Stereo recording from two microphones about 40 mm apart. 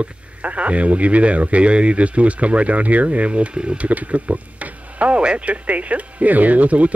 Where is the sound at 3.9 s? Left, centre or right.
Right.